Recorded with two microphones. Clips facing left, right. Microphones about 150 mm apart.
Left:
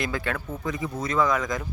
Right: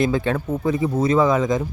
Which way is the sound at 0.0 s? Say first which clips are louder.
Right 9 dB; 25° right (ahead or behind).